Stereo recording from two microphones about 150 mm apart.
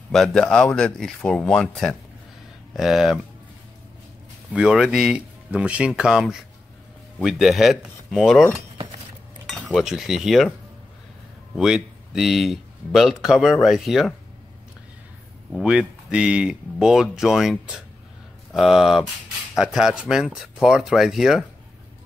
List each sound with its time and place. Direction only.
0.1 s speech: centre (ahead or behind)
4.5 s speech: 5° right (ahead or behind)
9.5 s speech: centre (ahead or behind)
11.5 s speech: 5° right (ahead or behind)
15.5 s speech: 5° right (ahead or behind)